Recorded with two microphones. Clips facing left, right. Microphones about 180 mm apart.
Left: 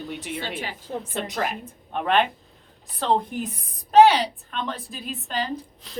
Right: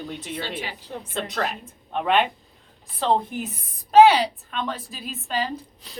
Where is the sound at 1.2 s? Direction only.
10° left (ahead or behind).